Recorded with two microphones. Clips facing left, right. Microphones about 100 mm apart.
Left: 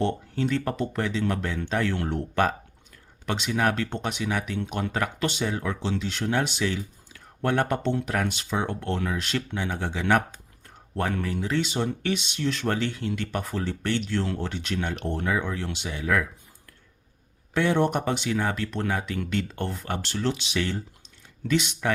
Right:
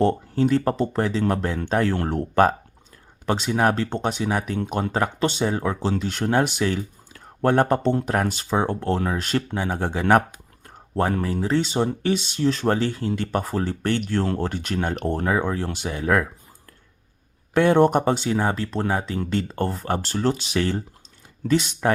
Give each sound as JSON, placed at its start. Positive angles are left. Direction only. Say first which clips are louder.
{"t": 0.0, "sound": "speech", "louder": "right 6 dB", "side_deg": -40}
{"t": 5.9, "sound": "speech", "louder": "right 4 dB", "side_deg": -45}
{"t": 17.5, "sound": "speech", "louder": "right 6 dB", "side_deg": -50}